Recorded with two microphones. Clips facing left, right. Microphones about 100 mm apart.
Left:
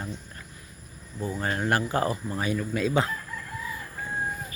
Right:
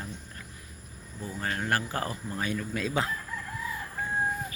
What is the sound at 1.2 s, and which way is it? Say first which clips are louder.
Speech: left 5 dB; 25° left (ahead or behind).